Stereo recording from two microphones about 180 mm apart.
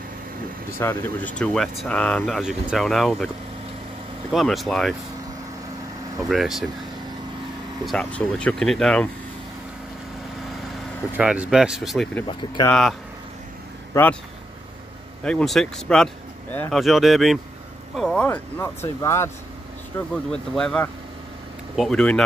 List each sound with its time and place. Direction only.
0.7 s speech: 10° left (ahead or behind)
4.3 s speech: centre (ahead or behind)
6.2 s speech: centre (ahead or behind)
7.8 s speech: 5° left (ahead or behind)
11.1 s speech: 5° right (ahead or behind)
12.3 s speech: 25° left (ahead or behind)
12.6 s speech: 5° left (ahead or behind)
13.9 s speech: 15° left (ahead or behind)
15.2 s speech: 5° left (ahead or behind)
16.8 s speech: centre (ahead or behind)
20.2 s speech: 5° left (ahead or behind)